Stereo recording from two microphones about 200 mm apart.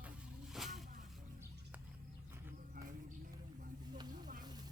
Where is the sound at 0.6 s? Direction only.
Centre (ahead or behind).